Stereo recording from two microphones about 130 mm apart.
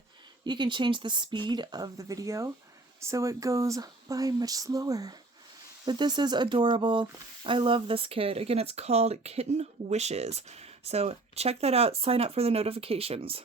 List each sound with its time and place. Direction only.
0.4 s speech: 35° right (ahead or behind)